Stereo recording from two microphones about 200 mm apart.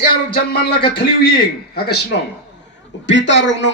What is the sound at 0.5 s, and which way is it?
Speech, 55° left (ahead or behind).